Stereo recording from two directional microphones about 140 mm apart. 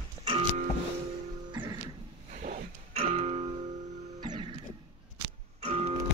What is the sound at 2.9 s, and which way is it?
Music, 50° right (ahead or behind).